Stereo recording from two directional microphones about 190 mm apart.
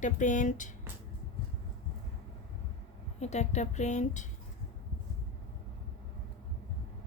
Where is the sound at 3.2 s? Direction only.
35° left (ahead or behind).